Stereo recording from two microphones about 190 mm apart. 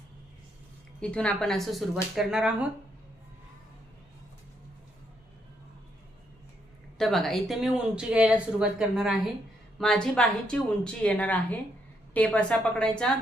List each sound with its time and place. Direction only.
1.0 s speech: 5° left (ahead or behind)
7.0 s speech: centre (ahead or behind)